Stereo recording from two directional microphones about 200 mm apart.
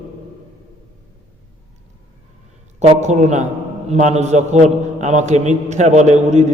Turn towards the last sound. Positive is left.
turn(degrees=-35)  # may be behind; listen again after turning